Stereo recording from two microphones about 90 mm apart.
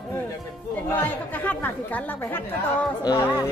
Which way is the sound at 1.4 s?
20° left (ahead or behind).